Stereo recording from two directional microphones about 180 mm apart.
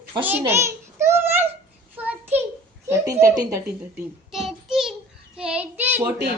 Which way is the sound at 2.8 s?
15° right (ahead or behind).